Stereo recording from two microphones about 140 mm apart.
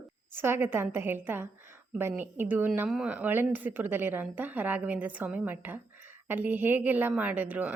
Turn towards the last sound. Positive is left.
turn(degrees=-10)  # may be behind; listen again after turning